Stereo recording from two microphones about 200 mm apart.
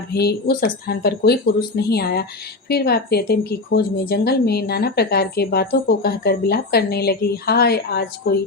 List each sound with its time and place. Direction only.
0.1 s a woman's voice: 55° left (ahead or behind)